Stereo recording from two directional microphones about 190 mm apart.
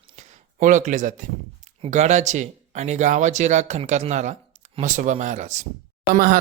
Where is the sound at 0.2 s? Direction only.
40° right (ahead or behind).